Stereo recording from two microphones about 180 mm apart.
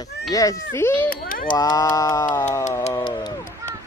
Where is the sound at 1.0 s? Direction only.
50° left (ahead or behind).